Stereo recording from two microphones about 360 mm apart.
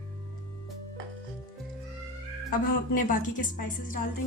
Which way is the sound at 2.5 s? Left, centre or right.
Left.